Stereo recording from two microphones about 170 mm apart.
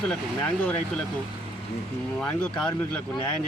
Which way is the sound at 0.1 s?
10° left (ahead or behind).